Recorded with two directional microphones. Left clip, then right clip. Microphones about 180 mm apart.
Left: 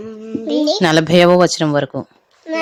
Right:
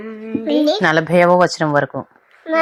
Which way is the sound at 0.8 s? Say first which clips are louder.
Left 4 dB; 35° left (ahead or behind).